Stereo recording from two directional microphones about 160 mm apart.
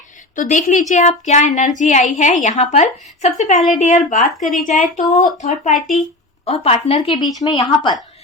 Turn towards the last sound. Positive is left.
turn(degrees=30)  # may be behind; listen again after turning